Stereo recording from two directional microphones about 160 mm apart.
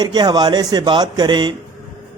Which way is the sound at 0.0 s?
25° right (ahead or behind).